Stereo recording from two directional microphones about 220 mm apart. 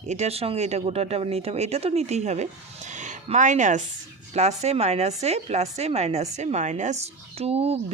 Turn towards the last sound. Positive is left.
turn(degrees=-25)  # may be behind; listen again after turning